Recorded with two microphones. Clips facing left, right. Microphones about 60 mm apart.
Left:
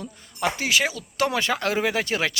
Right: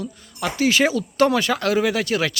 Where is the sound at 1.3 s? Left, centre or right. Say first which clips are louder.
Right 4 dB; left.